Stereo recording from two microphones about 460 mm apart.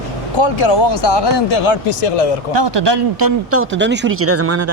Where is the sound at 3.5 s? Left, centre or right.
Right.